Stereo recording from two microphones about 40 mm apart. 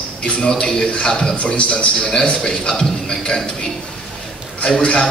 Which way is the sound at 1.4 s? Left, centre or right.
Left.